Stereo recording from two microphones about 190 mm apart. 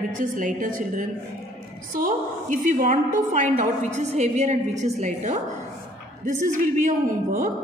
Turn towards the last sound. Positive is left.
turn(degrees=-40)  # may be behind; listen again after turning